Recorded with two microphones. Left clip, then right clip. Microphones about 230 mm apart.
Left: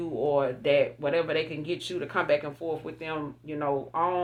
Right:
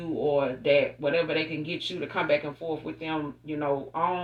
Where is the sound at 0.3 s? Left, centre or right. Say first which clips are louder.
Right 1 dB; left.